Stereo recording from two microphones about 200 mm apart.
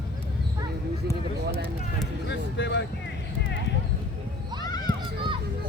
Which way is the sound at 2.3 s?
60° left (ahead or behind).